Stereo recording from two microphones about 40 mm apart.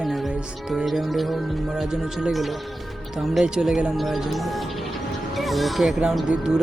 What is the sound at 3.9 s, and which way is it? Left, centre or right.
Speech, centre.